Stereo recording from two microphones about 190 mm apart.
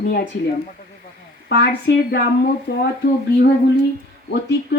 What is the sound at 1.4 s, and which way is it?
Speech, 65° left (ahead or behind).